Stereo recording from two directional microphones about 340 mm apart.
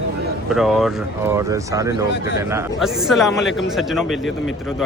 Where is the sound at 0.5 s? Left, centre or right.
Centre.